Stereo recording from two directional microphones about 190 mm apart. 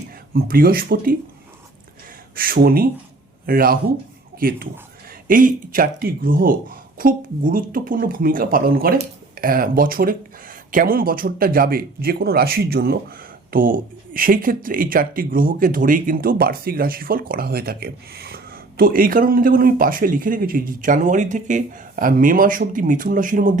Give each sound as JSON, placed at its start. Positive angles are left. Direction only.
{"t": 0.3, "sound": "speech", "side_deg": -50}
{"t": 2.3, "sound": "speech", "side_deg": -50}